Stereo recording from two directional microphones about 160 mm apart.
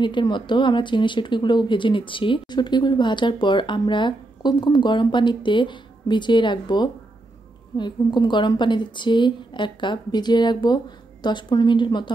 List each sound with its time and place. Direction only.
0.0 s speech: 30° left (ahead or behind)